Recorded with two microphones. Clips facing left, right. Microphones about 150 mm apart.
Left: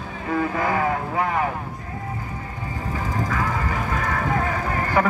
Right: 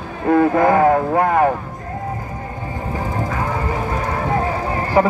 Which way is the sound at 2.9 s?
40° right (ahead or behind).